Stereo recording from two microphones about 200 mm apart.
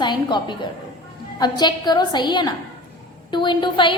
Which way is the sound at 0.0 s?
20° left (ahead or behind).